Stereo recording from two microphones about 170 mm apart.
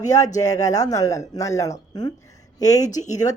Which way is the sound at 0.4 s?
20° left (ahead or behind).